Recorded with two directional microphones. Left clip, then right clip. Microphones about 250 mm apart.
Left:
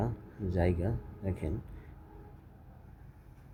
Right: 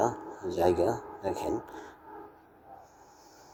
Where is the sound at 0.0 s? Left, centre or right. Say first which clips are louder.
Right 9 dB; centre.